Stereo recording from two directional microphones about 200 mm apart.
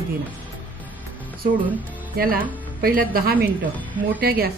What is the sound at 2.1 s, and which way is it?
A woman's voice, 45° right (ahead or behind).